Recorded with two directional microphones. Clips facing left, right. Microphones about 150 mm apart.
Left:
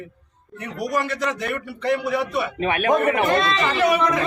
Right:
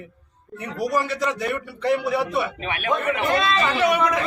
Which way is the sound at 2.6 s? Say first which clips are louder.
Left 7 dB; 40° left (ahead or behind).